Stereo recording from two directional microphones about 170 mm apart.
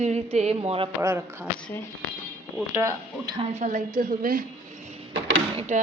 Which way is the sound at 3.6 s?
50° right (ahead or behind).